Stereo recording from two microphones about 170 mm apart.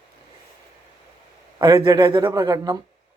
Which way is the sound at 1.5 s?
25° right (ahead or behind).